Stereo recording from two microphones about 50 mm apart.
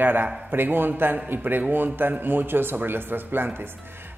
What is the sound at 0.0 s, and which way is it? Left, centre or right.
A man's voice, right.